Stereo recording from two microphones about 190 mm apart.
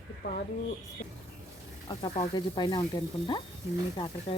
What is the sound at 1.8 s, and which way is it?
Speech, 25° left (ahead or behind).